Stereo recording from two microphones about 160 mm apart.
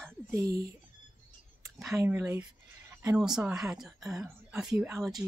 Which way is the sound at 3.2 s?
5° right (ahead or behind).